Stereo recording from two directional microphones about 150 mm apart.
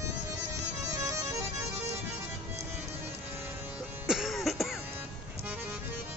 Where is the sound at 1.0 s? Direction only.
20° right (ahead or behind).